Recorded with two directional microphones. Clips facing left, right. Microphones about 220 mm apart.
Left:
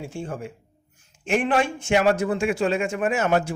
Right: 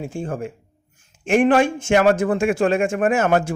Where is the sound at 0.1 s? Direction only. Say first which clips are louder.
Right 5 dB; 50° right (ahead or behind).